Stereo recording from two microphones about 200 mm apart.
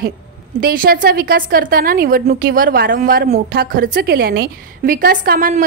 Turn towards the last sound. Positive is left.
turn(degrees=-45)  # may be behind; listen again after turning